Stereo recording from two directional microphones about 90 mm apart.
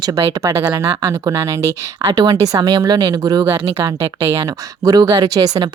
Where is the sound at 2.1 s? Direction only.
50° right (ahead or behind).